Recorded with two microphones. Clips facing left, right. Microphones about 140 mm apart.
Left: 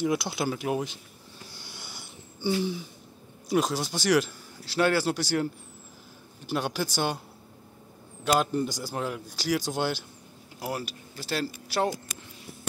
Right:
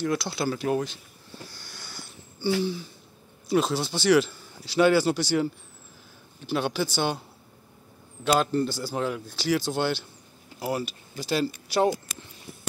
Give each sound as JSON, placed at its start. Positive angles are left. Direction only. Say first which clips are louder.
{"t": 0.0, "sound": "a man's voice", "louder": "even", "side_deg": 15}
{"t": 1.5, "sound": "sniff", "louder": "even", "side_deg": 25}
{"t": 2.6, "sound": "a man's voice", "louder": "right 2 dB", "side_deg": 15}
{"t": 6.5, "sound": "a man's voice", "louder": "right 3 dB", "side_deg": 5}
{"t": 8.2, "sound": "a man's voice", "louder": "right 2 dB", "side_deg": 10}
{"t": 8.9, "sound": "a man's voice", "louder": "right 3 dB", "side_deg": 5}
{"t": 11.1, "sound": "speech", "louder": "right 5 dB", "side_deg": 5}